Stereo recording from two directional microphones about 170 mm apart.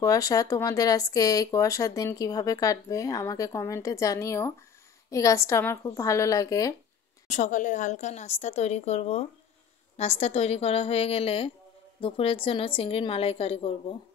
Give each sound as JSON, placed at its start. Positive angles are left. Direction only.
{"t": 0.0, "sound": "speech", "side_deg": 20}
{"t": 7.2, "sound": "a woman's voice", "side_deg": 45}